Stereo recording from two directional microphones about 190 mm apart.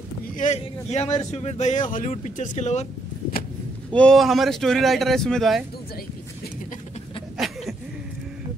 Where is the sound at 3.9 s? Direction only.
5° left (ahead or behind).